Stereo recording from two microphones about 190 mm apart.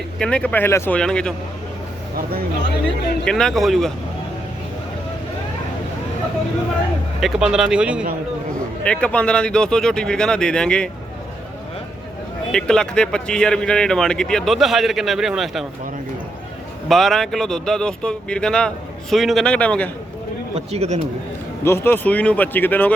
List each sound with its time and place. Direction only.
0.2 s speech: 5° left (ahead or behind)
3.2 s speech: 5° left (ahead or behind)
7.2 s speech: centre (ahead or behind)
8.8 s speech: 5° left (ahead or behind)
12.5 s speech: 5° left (ahead or behind)
16.9 s speech: centre (ahead or behind)
20.6 s speech: 35° right (ahead or behind)
21.6 s speech: 10° left (ahead or behind)